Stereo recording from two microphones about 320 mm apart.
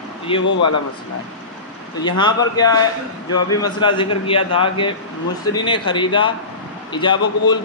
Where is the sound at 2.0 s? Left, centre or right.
Centre.